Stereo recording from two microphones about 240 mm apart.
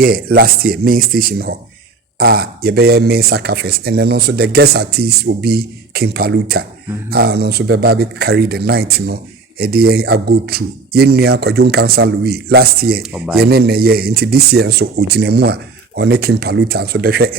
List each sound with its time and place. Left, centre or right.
0.0 s speech: right
13.0 s speech: centre
13.4 s speech: right